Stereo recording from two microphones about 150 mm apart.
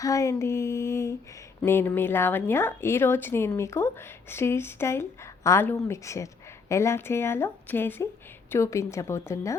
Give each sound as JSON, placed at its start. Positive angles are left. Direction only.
{"t": 0.0, "sound": "a woman's voice", "side_deg": 20}